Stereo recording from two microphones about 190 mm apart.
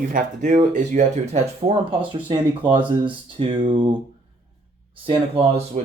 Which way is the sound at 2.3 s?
20° right (ahead or behind).